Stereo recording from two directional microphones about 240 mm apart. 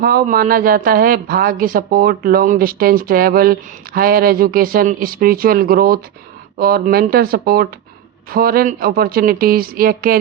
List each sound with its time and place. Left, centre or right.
0.0 s speech: right